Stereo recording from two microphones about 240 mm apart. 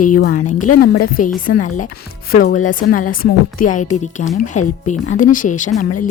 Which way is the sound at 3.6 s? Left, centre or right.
Left.